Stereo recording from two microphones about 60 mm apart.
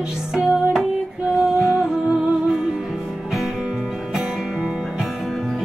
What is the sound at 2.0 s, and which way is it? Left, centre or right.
Music, right.